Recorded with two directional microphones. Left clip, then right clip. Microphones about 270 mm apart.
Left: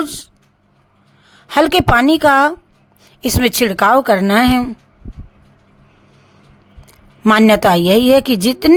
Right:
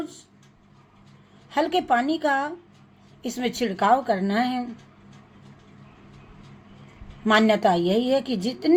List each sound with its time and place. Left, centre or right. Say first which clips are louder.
0.0 s speech: left 13 dB; left
1.5 s a woman's voice: left 10 dB; left
7.3 s a woman's voice: left 9 dB; left